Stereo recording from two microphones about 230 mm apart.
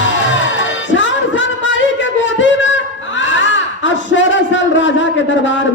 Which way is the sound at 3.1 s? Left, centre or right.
Left.